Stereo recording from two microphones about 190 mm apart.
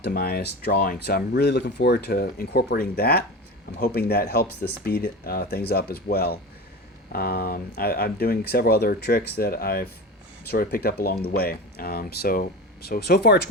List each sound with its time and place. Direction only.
0.0 s speech: 55° left (ahead or behind)